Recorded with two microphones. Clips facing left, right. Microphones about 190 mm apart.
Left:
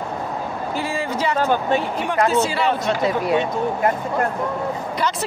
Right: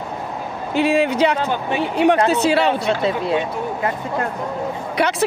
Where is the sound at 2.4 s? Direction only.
70° right (ahead or behind).